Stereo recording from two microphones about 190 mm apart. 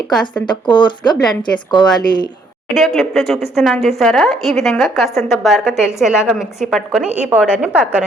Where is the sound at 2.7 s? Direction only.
Centre (ahead or behind).